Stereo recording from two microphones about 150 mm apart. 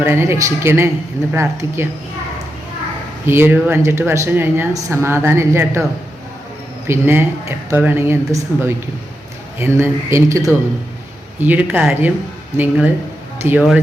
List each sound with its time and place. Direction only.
0.0 s speech: 15° right (ahead or behind)
3.2 s speech: 15° right (ahead or behind)
6.8 s speech: 15° right (ahead or behind)
9.6 s speech: 15° right (ahead or behind)